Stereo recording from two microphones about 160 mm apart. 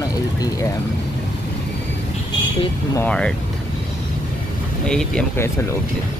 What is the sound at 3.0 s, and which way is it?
Speech, 5° left (ahead or behind).